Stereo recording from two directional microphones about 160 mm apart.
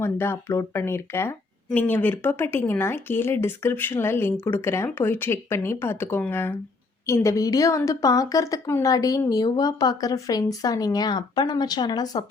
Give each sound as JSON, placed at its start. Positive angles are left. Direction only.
{"t": 0.0, "sound": "a woman's voice", "side_deg": 15}